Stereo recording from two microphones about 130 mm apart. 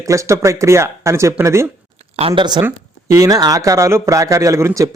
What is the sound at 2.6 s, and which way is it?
Speech, 25° right (ahead or behind).